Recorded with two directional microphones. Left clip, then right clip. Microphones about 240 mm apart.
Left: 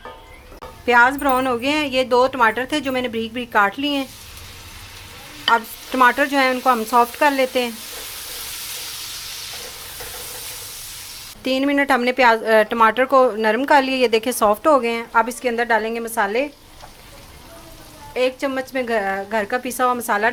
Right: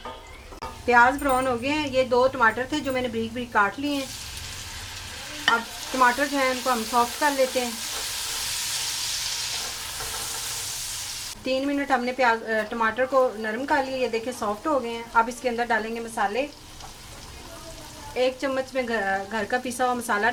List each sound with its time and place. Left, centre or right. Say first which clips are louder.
0.9 s speech: left 4 dB; left
6.0 s speech: left 6 dB; left
11.4 s speech: left 7 dB; left
18.1 s a woman's voice: left 4 dB; left